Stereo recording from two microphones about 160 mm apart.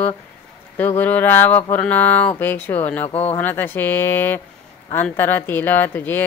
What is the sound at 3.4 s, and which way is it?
Speech, 10° left (ahead or behind).